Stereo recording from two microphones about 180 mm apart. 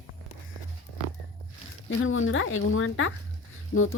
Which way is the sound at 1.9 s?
90° left.